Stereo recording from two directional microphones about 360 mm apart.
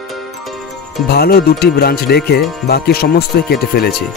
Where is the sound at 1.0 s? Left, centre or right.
Left.